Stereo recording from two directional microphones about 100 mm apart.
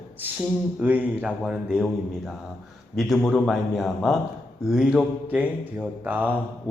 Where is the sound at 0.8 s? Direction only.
15° right (ahead or behind).